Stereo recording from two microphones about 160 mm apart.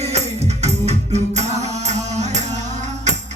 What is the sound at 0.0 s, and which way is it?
Music, 40° right (ahead or behind).